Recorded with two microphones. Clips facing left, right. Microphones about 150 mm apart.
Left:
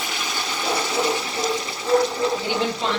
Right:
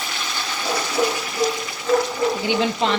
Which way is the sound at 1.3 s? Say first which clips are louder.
Right 2 dB; 30° left (ahead or behind).